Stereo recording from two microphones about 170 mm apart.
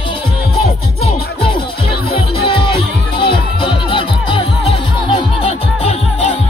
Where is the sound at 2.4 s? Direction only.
30° left (ahead or behind).